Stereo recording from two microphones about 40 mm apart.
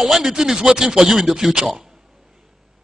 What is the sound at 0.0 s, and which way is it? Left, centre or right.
A man's voice, centre.